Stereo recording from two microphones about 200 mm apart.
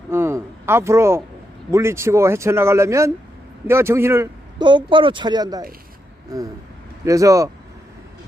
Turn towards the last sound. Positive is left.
turn(degrees=-15)  # may be behind; listen again after turning